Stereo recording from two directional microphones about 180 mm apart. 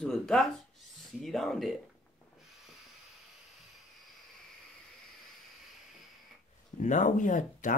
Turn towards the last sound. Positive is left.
turn(degrees=45)  # may be behind; listen again after turning